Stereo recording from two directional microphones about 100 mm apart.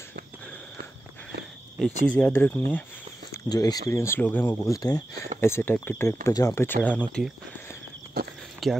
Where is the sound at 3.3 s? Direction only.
40° left (ahead or behind); by 4.6 s 20° left (ahead or behind).